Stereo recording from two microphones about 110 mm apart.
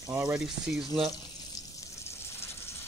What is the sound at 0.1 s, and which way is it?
Speech, 20° right (ahead or behind).